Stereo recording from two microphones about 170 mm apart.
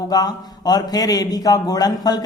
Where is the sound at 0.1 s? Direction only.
20° left (ahead or behind).